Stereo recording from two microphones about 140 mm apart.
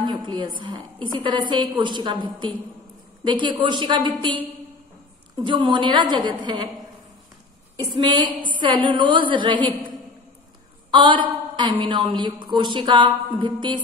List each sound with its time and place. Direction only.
0.0 s speech: 30° right (ahead or behind)
5.4 s speech: 35° right (ahead or behind)
7.8 s speech: 35° right (ahead or behind)
10.9 s a woman's voice: 35° right (ahead or behind)